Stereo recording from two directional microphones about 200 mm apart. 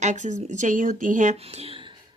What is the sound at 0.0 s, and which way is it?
A woman's voice, 35° right (ahead or behind).